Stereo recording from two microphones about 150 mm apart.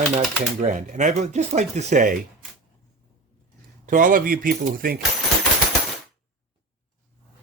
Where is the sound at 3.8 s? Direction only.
60° right (ahead or behind).